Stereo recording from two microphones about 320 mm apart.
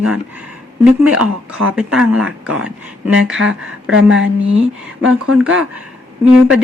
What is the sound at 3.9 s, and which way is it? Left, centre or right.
Speech, right.